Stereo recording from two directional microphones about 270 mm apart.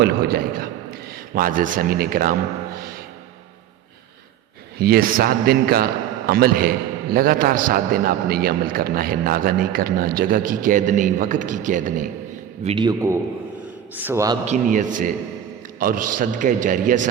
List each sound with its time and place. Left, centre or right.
0.0 s a man's voice: right
4.8 s a man's voice: right
12.6 s a man's voice: centre
14.4 s a man's voice: right